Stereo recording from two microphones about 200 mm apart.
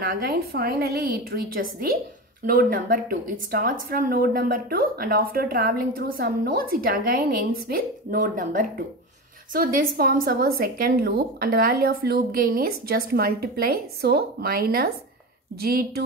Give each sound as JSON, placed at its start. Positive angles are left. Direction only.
{"t": 0.0, "sound": "a woman's voice", "side_deg": -50}